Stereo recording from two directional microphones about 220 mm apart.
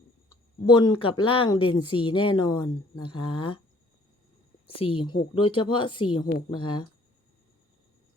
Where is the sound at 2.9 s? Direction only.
90° left.